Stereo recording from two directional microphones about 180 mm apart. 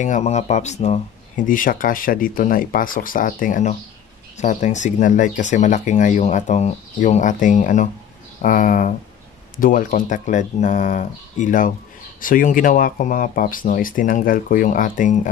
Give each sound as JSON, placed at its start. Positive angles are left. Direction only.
{"t": 0.0, "sound": "speech", "side_deg": 40}